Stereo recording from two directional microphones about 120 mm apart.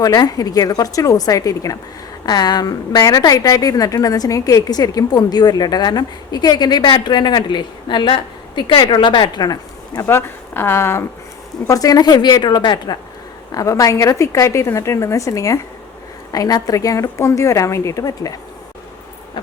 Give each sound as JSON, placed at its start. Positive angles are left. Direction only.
{"t": 0.0, "sound": "a woman's voice", "side_deg": 35}
{"t": 10.1, "sound": "a woman's voice", "side_deg": 20}